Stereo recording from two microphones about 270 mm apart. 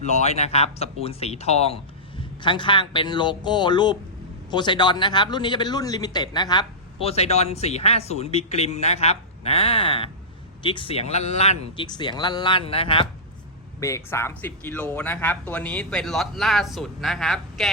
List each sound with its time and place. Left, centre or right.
0.0 s a man's voice: left; by 17.7 s centre